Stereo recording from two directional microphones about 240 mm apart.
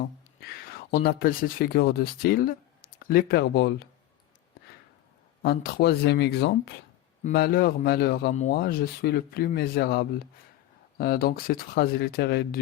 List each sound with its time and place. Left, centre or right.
0.3 s speech: left
5.4 s a man's voice: left